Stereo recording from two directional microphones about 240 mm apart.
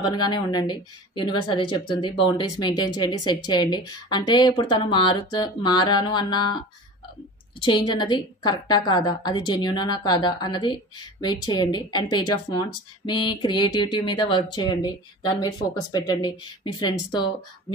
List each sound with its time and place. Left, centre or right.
0.0 s a woman's voice: centre
7.6 s a woman's voice: centre